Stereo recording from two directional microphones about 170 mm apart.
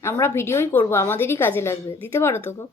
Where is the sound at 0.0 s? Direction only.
15° left (ahead or behind).